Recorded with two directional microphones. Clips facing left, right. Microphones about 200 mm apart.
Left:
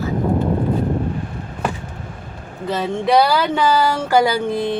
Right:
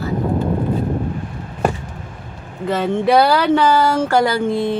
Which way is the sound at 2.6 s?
Centre (ahead or behind).